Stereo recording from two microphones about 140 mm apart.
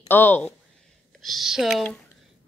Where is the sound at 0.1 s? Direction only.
15° left (ahead or behind).